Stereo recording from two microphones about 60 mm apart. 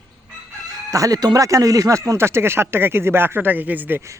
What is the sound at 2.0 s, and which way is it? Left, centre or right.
Speech, right.